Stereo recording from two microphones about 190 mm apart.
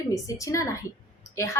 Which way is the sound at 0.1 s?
15° left (ahead or behind).